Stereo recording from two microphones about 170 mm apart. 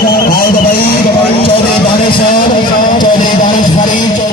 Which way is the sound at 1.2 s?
30° left (ahead or behind).